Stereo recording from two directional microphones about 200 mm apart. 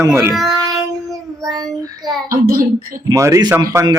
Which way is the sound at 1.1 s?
20° right (ahead or behind).